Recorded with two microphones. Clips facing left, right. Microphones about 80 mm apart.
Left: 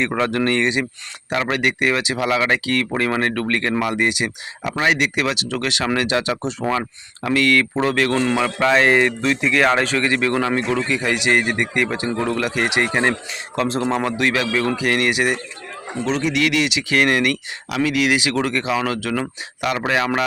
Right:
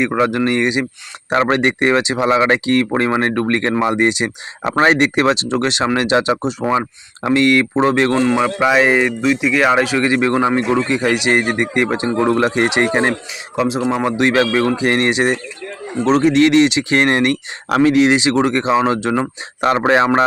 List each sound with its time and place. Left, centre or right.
0.0 s speech: centre
1.3 s speech: right
4.7 s speech: right
13.6 s speech: centre; by 17.3 s right
17.7 s speech: right